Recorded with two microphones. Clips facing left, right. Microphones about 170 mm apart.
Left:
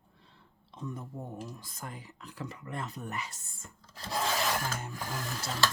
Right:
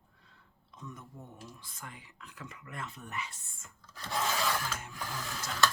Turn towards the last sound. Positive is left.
turn(degrees=30)  # may be behind; listen again after turning